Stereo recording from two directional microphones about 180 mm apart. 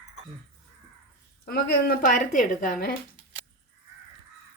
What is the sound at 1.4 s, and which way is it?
A woman's voice, 55° left (ahead or behind).